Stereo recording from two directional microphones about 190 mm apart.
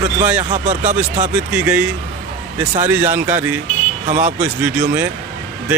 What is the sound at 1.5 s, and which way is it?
Speech, 5° right (ahead or behind).